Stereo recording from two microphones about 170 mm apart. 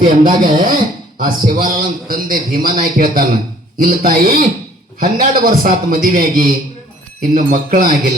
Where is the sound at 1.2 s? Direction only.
55° right (ahead or behind).